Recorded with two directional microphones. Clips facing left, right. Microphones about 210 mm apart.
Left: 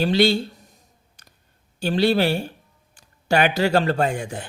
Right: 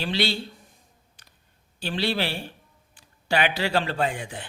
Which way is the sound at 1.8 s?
45° left (ahead or behind).